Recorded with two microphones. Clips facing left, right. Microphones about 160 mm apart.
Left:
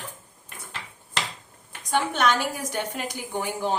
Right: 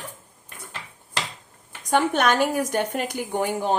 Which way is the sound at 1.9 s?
50° right (ahead or behind).